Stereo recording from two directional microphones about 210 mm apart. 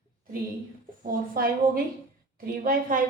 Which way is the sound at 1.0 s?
45° right (ahead or behind).